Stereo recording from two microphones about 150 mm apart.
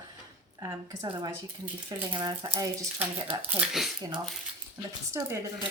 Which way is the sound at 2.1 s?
30° right (ahead or behind).